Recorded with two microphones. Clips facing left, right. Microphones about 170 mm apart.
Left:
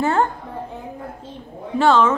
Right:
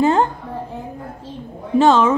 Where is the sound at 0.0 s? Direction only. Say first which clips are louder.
Right 3 dB; 20° right (ahead or behind).